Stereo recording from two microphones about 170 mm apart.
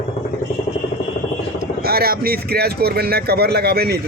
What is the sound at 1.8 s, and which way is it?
Speech, 65° right (ahead or behind).